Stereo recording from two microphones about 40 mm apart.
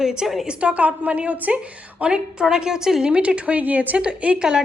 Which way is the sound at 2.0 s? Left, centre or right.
Right.